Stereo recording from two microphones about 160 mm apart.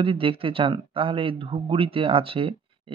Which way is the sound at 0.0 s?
35° right (ahead or behind).